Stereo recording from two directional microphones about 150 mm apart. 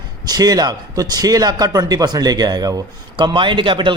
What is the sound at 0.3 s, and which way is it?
A man's voice, 25° right (ahead or behind).